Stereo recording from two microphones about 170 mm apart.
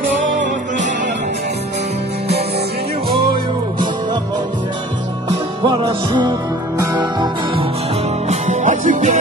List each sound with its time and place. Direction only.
5.7 s music: 25° right (ahead or behind)
8.3 s music: 45° right (ahead or behind)